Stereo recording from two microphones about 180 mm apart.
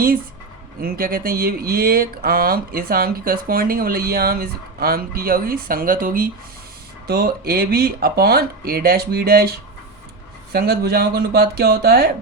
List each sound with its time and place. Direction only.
0.8 s speech: 55° right (ahead or behind)